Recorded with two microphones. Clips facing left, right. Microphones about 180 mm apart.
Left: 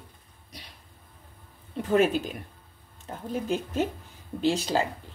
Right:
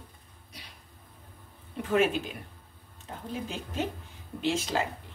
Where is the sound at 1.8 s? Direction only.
40° left (ahead or behind).